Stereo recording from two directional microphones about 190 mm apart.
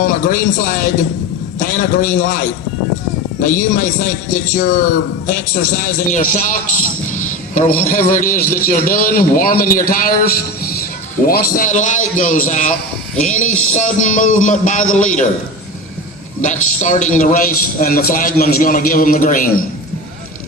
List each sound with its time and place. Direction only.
0.0 s a man's voice: 45° left (ahead or behind)
11.3 s a man's voice: 50° left (ahead or behind)
16.4 s a man's voice: 40° left (ahead or behind)